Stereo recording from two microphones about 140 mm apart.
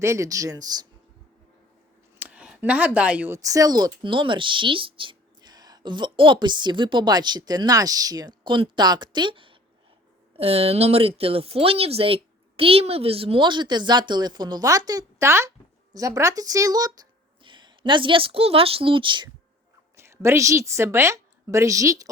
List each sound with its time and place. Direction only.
0.0 s speech: 20° right (ahead or behind)
2.1 s speech: 10° right (ahead or behind); by 19.3 s 35° right (ahead or behind)
20.0 s a woman's voice: 20° right (ahead or behind)